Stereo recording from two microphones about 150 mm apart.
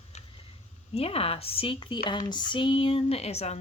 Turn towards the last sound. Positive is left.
turn(degrees=45)  # may be behind; listen again after turning